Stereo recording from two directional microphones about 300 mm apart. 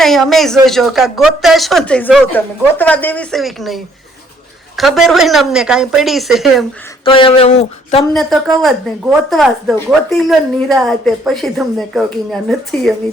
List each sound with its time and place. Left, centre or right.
0.0 s speech: centre
4.8 s speech: centre
7.0 s speech: centre
8.1 s speech: centre